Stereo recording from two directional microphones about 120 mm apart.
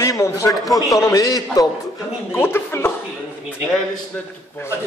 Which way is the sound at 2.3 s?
20° left (ahead or behind).